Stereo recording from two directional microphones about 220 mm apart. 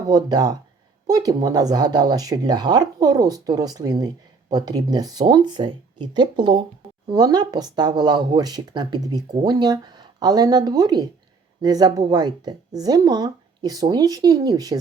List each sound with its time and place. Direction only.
0.1 s speech: 15° right (ahead or behind)